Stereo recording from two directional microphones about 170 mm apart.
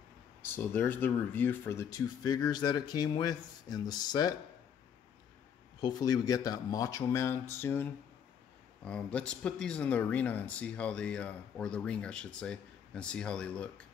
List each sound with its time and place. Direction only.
0.6 s speech: 10° left (ahead or behind)
5.8 s speech: 25° left (ahead or behind); by 13.8 s 5° left (ahead or behind)